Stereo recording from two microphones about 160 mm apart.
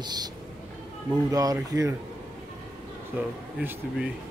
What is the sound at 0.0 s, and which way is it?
Speech, 25° right (ahead or behind).